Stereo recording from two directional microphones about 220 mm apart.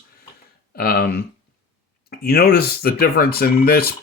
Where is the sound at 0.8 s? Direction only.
45° left (ahead or behind).